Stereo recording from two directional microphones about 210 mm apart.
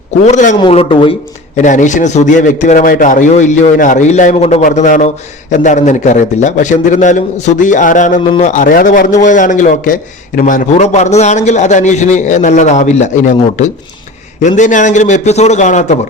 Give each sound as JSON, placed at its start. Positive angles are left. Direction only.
{"t": 0.3, "sound": "a man's voice", "side_deg": 35}
{"t": 0.6, "sound": "speech", "side_deg": 25}
{"t": 1.5, "sound": "a man's voice", "side_deg": 35}